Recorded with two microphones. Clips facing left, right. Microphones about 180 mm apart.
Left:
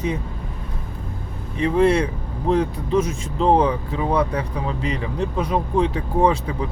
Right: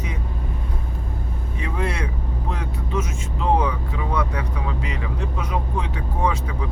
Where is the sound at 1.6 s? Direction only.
30° left (ahead or behind).